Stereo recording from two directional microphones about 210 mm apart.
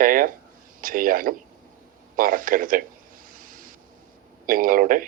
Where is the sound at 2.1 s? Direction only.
40° right (ahead or behind).